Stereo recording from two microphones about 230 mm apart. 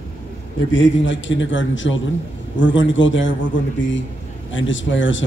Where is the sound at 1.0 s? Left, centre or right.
Left.